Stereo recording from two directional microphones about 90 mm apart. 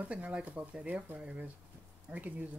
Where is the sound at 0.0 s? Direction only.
15° right (ahead or behind).